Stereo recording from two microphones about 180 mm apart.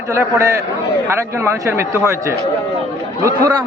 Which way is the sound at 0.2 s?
15° right (ahead or behind).